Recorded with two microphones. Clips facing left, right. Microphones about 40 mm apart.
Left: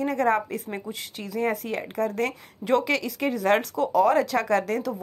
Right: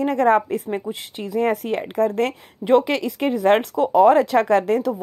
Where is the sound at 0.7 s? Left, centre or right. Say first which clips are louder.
Right 7 dB; right.